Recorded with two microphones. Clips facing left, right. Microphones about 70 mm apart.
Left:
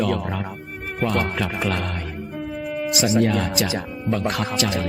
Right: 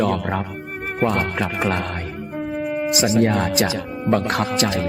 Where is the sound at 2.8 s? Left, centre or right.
Right.